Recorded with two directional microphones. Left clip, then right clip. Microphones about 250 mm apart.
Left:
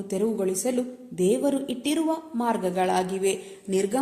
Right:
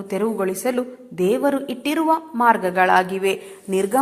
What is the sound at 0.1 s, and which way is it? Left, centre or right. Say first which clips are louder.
A woman's voice: right 4 dB; centre.